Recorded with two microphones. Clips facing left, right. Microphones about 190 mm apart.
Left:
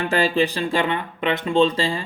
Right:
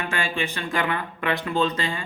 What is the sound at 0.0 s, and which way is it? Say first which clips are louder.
A man's voice: left 8 dB; 35° left (ahead or behind).